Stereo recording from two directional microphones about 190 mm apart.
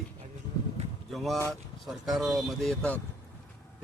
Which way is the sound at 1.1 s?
Centre (ahead or behind).